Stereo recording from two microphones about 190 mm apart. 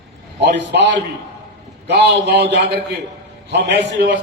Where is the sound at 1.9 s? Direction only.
60° right (ahead or behind).